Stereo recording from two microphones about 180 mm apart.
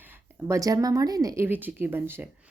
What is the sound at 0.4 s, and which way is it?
Speech, 15° right (ahead or behind).